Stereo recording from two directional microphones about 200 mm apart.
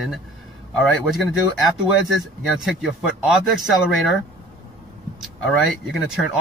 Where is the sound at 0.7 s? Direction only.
Centre (ahead or behind).